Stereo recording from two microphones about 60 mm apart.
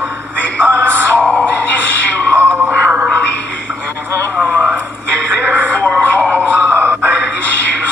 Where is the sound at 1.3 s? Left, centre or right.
Left.